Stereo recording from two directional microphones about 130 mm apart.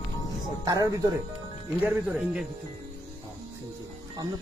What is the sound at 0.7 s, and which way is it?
Speech, 30° right (ahead or behind).